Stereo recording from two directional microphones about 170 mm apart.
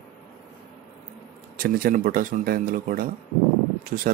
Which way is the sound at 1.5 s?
60° right (ahead or behind).